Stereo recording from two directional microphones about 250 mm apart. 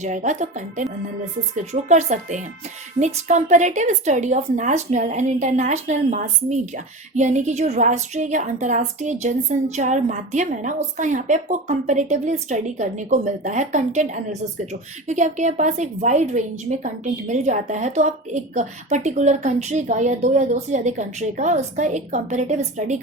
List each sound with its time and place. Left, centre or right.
0.0 s a woman's voice: right